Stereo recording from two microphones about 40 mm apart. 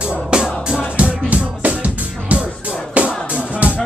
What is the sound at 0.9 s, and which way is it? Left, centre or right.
Music, right.